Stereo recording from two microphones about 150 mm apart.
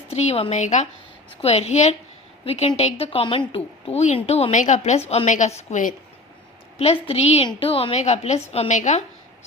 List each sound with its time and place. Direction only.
0.1 s a woman's voice: 45° left (ahead or behind)